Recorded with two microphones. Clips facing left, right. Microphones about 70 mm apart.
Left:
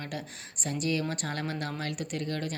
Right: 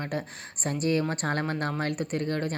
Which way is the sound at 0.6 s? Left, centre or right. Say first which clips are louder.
Right 4 dB; right.